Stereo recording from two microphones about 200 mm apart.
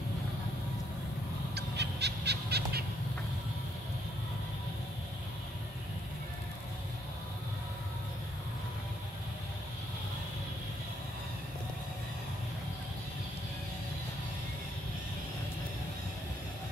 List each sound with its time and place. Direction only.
1.5 s owl: 55° right (ahead or behind)